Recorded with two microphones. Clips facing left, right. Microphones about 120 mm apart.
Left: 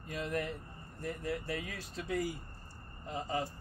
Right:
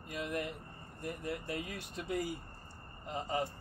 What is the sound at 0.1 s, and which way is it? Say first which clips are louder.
Speech: left 2 dB; 15° right (ahead or behind).